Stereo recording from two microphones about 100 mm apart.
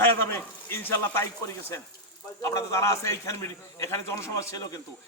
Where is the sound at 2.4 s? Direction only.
30° left (ahead or behind).